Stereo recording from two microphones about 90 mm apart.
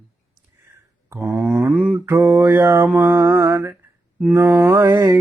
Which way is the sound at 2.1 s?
35° right (ahead or behind).